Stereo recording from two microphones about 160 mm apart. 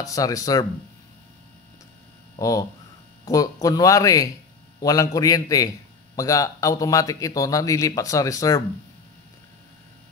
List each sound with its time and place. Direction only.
0.0 s speech: 20° left (ahead or behind)
2.3 s speech: 20° left (ahead or behind)